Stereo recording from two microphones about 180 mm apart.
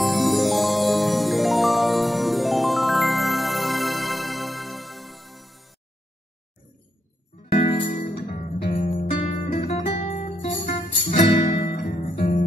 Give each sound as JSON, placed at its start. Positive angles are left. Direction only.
{"t": 0.0, "sound": "music", "side_deg": 0}
{"t": 7.5, "sound": "music", "side_deg": 50}